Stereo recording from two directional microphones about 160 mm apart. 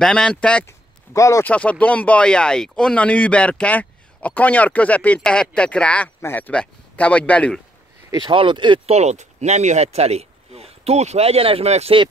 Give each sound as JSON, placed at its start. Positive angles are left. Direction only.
{"t": 0.0, "sound": "speech", "side_deg": 5}
{"t": 0.7, "sound": "a sound", "side_deg": 20}
{"t": 1.5, "sound": "speech", "side_deg": 10}
{"t": 8.1, "sound": "speech", "side_deg": -30}